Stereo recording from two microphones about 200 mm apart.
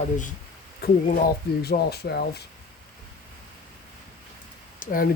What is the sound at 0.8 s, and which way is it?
Speech, 50° left (ahead or behind).